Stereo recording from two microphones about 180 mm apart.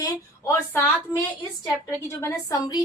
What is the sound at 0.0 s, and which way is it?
Speech, 15° left (ahead or behind).